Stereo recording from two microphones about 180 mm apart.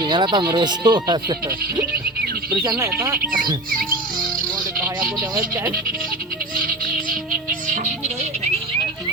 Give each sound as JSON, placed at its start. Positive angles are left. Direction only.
{"t": 0.0, "sound": "speech", "side_deg": -25}
{"t": 2.2, "sound": "bird", "side_deg": -60}
{"t": 2.6, "sound": "speech", "side_deg": -15}
{"t": 6.6, "sound": "music", "side_deg": -50}
{"t": 7.7, "sound": "music", "side_deg": -40}